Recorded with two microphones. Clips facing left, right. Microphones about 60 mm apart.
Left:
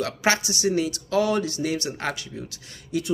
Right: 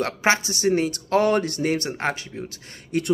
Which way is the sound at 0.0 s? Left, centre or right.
Right.